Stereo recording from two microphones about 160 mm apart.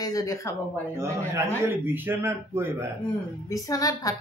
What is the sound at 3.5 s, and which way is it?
Speech, 20° left (ahead or behind).